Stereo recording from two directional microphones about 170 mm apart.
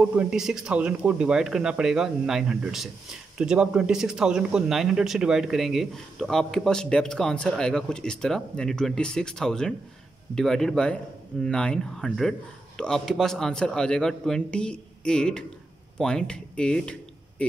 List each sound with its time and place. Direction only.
0.0 s speech: 10° right (ahead or behind)